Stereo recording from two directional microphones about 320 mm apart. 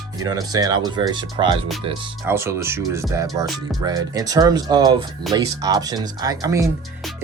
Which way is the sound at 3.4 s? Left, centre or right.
Centre.